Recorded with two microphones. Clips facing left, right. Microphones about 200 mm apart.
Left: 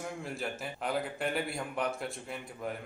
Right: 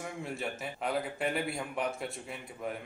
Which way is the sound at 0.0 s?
Centre (ahead or behind).